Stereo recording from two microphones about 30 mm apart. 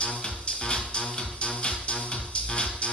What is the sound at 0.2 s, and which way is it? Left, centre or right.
Music, left.